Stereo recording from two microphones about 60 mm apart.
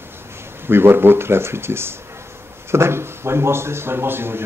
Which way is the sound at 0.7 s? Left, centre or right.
Right.